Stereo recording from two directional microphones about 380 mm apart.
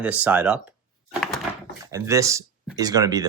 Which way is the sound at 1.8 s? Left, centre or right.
Centre.